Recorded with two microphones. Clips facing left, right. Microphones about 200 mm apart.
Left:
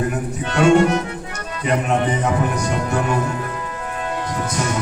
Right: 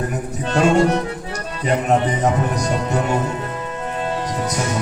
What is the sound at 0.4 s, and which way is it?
Speech, 35° right (ahead or behind).